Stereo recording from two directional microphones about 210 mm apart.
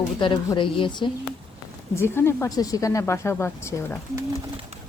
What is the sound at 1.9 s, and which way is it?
Speech, 10° left (ahead or behind).